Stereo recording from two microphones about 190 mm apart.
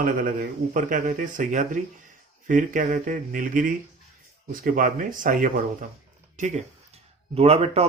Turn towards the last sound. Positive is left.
turn(degrees=-30)  # may be behind; listen again after turning